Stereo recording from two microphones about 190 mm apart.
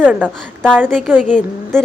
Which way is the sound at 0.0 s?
10° right (ahead or behind).